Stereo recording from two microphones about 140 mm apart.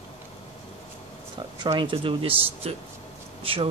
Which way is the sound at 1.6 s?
35° right (ahead or behind).